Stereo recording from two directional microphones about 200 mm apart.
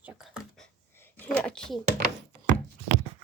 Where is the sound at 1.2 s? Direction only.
5° left (ahead or behind).